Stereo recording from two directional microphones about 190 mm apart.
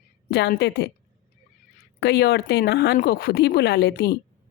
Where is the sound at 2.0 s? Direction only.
60° left (ahead or behind).